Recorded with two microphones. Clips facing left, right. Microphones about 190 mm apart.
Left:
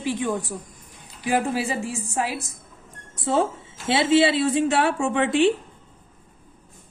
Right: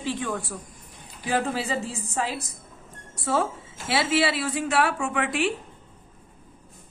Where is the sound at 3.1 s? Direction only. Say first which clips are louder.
Left 3 dB; 20° left (ahead or behind).